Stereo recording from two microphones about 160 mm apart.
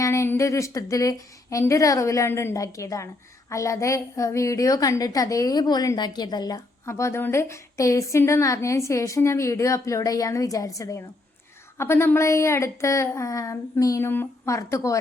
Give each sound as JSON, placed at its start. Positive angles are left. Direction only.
{"t": 0.0, "sound": "a woman's voice", "side_deg": 15}